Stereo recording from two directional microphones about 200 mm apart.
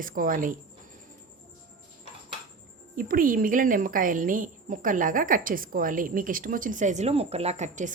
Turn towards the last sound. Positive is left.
turn(degrees=-35)  # may be behind; listen again after turning